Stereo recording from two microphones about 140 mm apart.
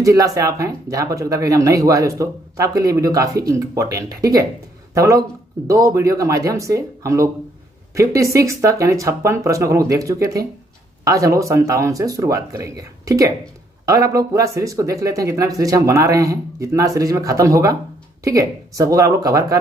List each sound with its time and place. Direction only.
0.0 s speech: 25° right (ahead or behind)